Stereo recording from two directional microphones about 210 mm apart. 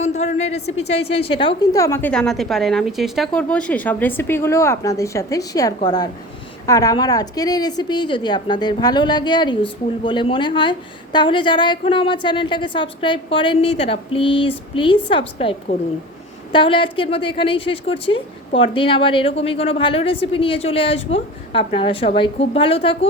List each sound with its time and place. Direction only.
0.0 s a woman's voice: 35° left (ahead or behind)